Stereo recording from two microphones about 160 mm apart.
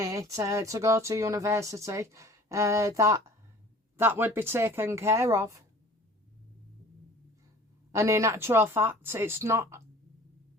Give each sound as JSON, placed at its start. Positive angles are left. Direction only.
{"t": 0.0, "sound": "speech", "side_deg": -20}
{"t": 7.9, "sound": "speech", "side_deg": -20}